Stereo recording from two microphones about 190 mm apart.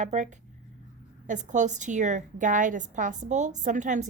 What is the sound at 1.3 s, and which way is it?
A woman's voice, 40° right (ahead or behind).